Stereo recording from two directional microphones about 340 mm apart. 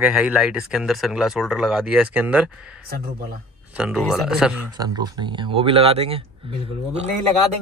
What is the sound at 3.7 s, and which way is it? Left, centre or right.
Speech, centre.